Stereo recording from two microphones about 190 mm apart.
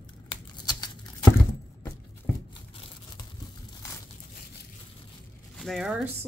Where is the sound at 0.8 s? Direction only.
20° left (ahead or behind).